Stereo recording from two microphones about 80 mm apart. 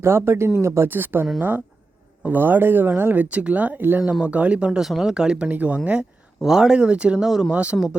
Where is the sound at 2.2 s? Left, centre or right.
Right.